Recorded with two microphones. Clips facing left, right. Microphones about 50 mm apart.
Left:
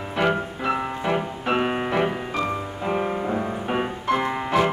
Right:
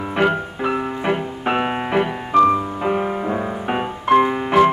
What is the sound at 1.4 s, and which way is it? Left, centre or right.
Music, right.